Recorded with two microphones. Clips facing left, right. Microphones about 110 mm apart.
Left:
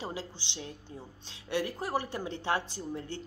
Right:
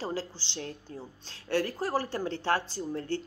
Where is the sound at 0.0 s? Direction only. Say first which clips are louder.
Right 4 dB; 15° left (ahead or behind).